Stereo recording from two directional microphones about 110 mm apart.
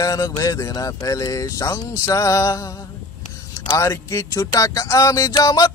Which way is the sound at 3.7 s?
25° left (ahead or behind).